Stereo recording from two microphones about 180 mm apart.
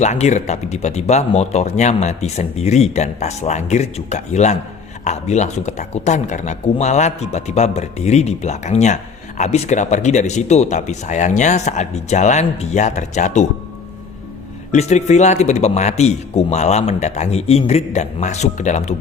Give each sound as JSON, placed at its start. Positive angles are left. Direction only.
{"t": 0.0, "sound": "speech", "side_deg": 40}
{"t": 14.7, "sound": "speech", "side_deg": 40}